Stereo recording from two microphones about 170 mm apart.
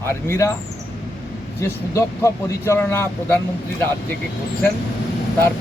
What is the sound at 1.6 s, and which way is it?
A man's voice, 15° left (ahead or behind).